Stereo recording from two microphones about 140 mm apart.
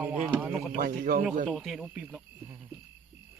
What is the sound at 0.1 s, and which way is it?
Speech, 10° right (ahead or behind).